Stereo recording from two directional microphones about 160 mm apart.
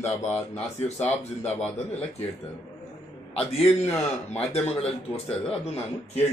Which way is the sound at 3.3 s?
40° left (ahead or behind).